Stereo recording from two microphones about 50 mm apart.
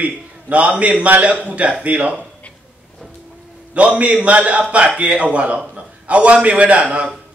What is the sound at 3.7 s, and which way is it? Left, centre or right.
A man's voice, right.